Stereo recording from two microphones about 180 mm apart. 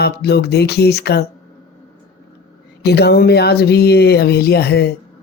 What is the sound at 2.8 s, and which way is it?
Speech, 65° left (ahead or behind).